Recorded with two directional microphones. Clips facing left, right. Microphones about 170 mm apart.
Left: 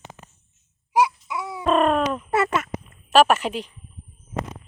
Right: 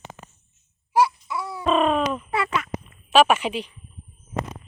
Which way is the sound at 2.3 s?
50° left (ahead or behind).